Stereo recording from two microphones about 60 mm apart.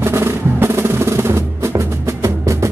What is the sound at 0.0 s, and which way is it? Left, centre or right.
Music, right.